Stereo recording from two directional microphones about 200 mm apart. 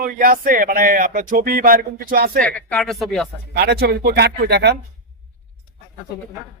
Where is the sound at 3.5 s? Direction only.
55° right (ahead or behind).